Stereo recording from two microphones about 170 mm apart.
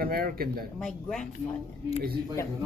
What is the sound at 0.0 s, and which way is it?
Speech, 60° right (ahead or behind).